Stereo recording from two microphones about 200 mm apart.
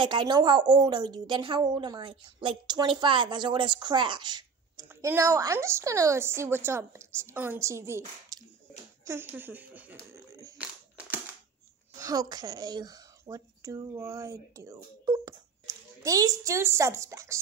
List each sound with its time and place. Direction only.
0.0 s a woman's voice: 25° right (ahead or behind)
10.6 s crushing: 5° right (ahead or behind)
12.0 s speech: 20° right (ahead or behind)